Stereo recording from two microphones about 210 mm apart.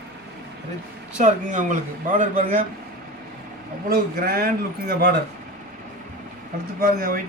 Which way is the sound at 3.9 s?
45° right (ahead or behind).